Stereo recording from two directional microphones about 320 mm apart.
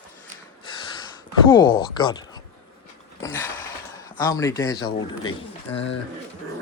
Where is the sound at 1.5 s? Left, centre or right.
Centre.